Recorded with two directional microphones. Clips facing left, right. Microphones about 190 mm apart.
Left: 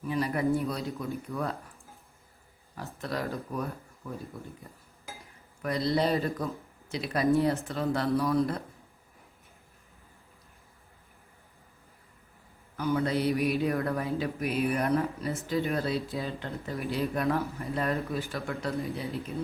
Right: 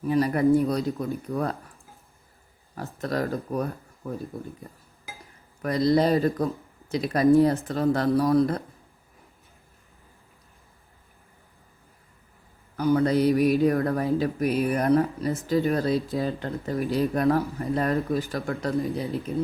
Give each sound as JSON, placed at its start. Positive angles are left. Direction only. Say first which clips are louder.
{"t": 0.0, "sound": "speech", "louder": "right 7 dB", "side_deg": -40}
{"t": 2.7, "sound": "speech", "louder": "right 6 dB", "side_deg": -45}
{"t": 4.0, "sound": "speech", "louder": "right 6 dB", "side_deg": -50}
{"t": 5.6, "sound": "speech", "louder": "right 6 dB", "side_deg": -40}
{"t": 12.7, "sound": "speech", "louder": "right 6 dB", "side_deg": -35}